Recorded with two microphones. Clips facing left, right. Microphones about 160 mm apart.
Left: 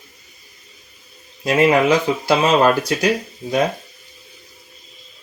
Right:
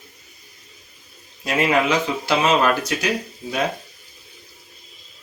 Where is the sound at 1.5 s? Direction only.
35° left (ahead or behind).